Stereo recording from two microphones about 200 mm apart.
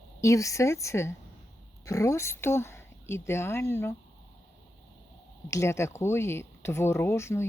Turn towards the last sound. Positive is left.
turn(degrees=15)  # may be behind; listen again after turning